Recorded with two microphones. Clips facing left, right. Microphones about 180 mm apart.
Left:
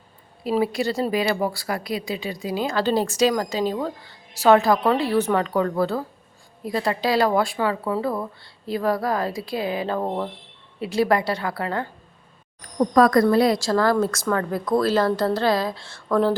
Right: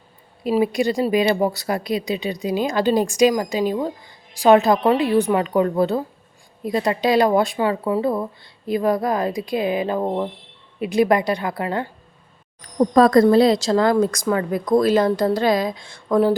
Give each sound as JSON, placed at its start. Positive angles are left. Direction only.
{"t": 0.6, "sound": "a woman's voice", "side_deg": -15}